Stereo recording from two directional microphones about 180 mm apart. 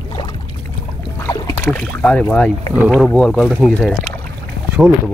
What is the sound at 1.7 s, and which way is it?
Speech, 5° left (ahead or behind).